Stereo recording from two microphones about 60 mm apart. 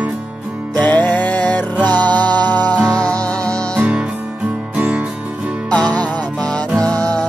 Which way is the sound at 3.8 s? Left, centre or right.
Centre.